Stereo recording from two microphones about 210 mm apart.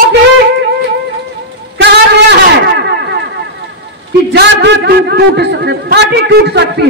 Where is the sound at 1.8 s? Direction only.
55° right (ahead or behind).